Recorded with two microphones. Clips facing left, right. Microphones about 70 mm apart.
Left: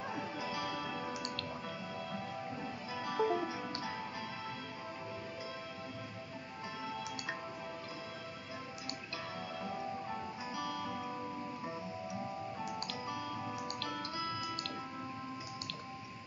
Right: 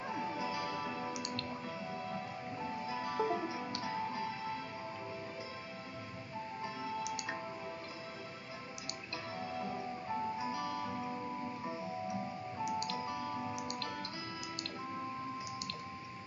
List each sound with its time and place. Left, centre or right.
0.2 s music: right
2.9 s music: right
9.4 s music: right
12.8 s music: right
13.4 s music: centre